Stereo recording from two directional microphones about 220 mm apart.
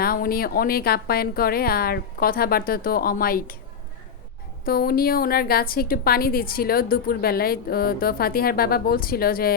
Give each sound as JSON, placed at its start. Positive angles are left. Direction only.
{"t": 0.0, "sound": "a woman's voice", "side_deg": 40}
{"t": 4.6, "sound": "a woman's voice", "side_deg": 45}